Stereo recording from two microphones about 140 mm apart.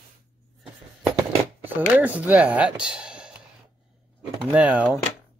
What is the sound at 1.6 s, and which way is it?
Speech, 10° right (ahead or behind).